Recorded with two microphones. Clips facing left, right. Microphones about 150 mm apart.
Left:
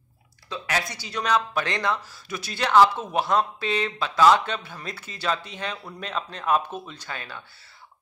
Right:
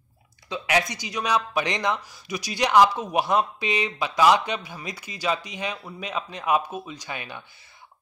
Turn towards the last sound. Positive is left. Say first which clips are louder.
# right 2 dB
turn(degrees=-15)  # may be behind; listen again after turning